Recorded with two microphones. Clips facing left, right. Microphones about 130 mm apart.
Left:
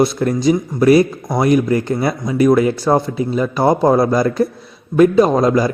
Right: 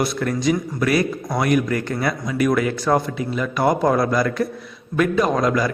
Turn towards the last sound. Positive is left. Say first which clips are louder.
# left 6 dB
turn(degrees=30)  # may be behind; listen again after turning